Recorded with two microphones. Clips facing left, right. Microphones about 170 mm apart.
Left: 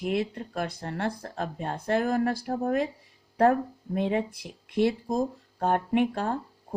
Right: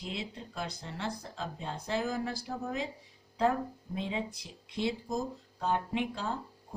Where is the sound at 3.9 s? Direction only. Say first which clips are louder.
Left 9 dB; 60° left (ahead or behind).